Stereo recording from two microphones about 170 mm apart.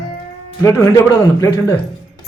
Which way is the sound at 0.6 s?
20° left (ahead or behind).